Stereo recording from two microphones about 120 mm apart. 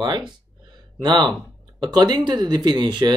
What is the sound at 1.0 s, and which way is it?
Speech, 35° right (ahead or behind).